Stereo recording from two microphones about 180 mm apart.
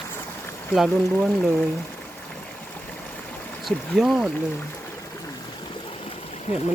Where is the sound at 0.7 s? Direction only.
Centre (ahead or behind).